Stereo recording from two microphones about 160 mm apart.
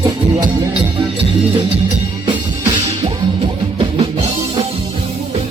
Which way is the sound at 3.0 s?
30° right (ahead or behind).